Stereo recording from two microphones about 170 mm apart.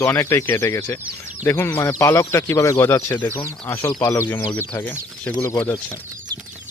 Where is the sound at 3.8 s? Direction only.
25° left (ahead or behind).